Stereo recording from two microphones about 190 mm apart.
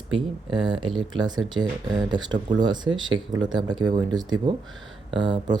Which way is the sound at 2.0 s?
25° right (ahead or behind).